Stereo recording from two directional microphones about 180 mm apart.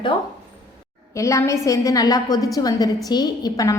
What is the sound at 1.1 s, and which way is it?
A woman's voice, 15° left (ahead or behind).